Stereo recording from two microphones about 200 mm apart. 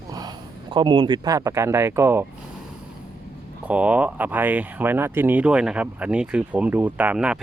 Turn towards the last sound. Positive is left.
turn(degrees=-5)  # may be behind; listen again after turning